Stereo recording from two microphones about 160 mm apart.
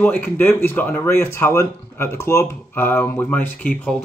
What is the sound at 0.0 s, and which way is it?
Speech, 10° left (ahead or behind).